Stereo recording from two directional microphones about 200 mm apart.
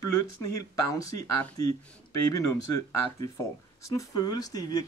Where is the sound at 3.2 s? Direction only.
15° left (ahead or behind).